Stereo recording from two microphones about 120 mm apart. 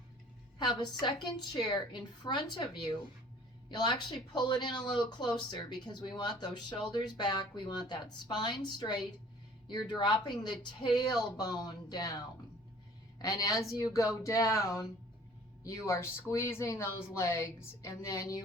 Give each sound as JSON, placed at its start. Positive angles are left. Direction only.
{"t": 0.6, "sound": "a woman's voice", "side_deg": 35}
{"t": 13.2, "sound": "speech", "side_deg": 30}